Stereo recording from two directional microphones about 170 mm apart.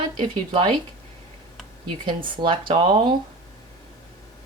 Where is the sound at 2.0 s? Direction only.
30° right (ahead or behind).